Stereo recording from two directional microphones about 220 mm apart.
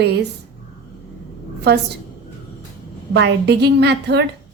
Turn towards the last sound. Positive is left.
turn(degrees=-50)  # may be behind; listen again after turning